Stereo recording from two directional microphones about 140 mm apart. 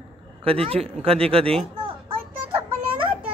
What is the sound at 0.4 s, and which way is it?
Speech, 40° right (ahead or behind).